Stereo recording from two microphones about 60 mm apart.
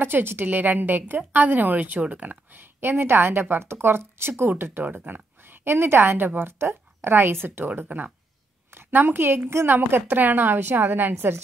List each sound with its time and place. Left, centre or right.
0.0 s a woman's voice: right